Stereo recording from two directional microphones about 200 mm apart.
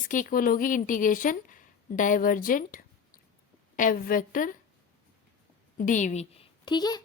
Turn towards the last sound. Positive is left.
turn(degrees=20)  # may be behind; listen again after turning